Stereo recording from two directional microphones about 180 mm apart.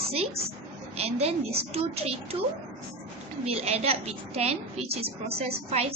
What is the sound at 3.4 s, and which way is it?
A woman's voice, 35° right (ahead or behind).